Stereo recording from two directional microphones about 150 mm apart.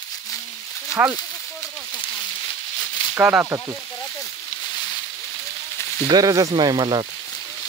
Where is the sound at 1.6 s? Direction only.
30° left (ahead or behind).